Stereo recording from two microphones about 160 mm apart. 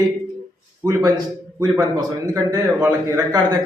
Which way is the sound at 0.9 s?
20° right (ahead or behind).